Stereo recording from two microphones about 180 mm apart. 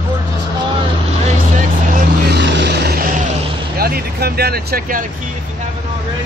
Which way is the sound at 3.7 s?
55° right (ahead or behind).